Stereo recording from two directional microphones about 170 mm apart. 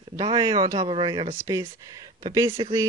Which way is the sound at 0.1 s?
20° right (ahead or behind).